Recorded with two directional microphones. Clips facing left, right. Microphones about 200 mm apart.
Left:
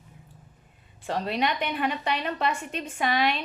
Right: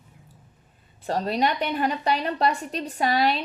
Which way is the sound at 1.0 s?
40° right (ahead or behind).